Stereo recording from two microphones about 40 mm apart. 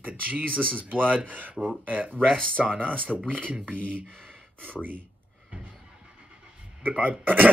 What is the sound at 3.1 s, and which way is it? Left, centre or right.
Speech, centre.